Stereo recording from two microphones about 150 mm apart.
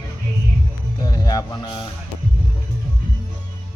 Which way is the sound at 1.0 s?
25° left (ahead or behind).